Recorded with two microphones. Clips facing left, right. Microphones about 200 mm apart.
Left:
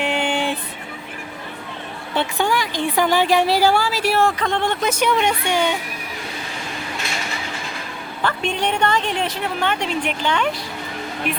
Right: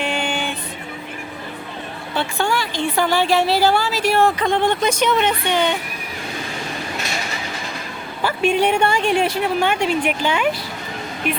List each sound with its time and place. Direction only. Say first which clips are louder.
0.0 s music: left 2 dB; 20° left (ahead or behind)
2.1 s a woman's voice: left 1 dB; 15° left (ahead or behind)
8.2 s a woman's voice: right 5 dB; 10° right (ahead or behind)